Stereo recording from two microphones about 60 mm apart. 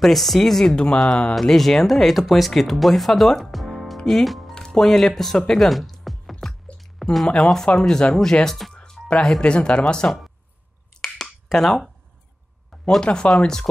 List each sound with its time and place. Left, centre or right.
0.0 s speech: centre
7.0 s a sound: centre
7.2 s speech: centre
9.0 s music: centre
9.4 s speech: centre
10.0 s speech: centre
11.0 s a sound: centre
13.0 s speech: centre